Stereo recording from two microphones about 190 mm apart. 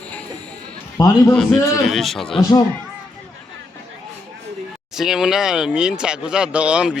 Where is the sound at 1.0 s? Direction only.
20° left (ahead or behind).